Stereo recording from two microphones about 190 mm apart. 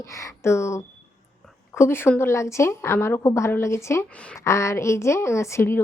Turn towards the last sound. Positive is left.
turn(degrees=15)  # may be behind; listen again after turning